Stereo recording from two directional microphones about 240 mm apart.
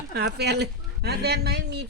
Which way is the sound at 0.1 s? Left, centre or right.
Right.